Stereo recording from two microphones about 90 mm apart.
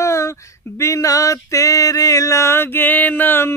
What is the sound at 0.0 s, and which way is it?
Female singing, 35° left (ahead or behind).